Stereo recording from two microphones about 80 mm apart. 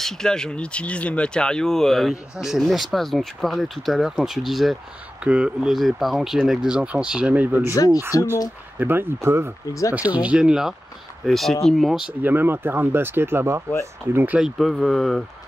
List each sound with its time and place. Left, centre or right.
0.0 s speech: centre
5.2 s speech: centre
7.7 s speech: left
8.7 s speech: right
9.9 s speech: centre
11.2 s speech: centre
12.1 s speech: right
14.4 s speech: centre